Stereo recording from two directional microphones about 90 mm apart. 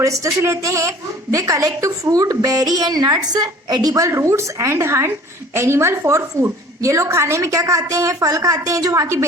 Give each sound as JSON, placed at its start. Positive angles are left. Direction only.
{"t": 0.0, "sound": "a woman's voice", "side_deg": -35}